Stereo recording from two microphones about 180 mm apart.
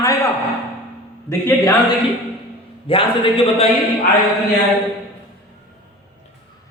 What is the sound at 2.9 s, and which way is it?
Speech, 30° left (ahead or behind).